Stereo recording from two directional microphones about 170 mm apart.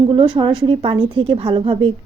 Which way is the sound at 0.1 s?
30° right (ahead or behind).